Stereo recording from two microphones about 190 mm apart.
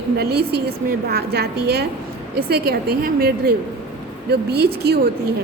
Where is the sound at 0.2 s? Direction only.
60° right (ahead or behind).